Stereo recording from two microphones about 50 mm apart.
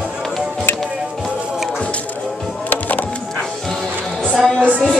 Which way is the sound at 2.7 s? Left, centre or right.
Left.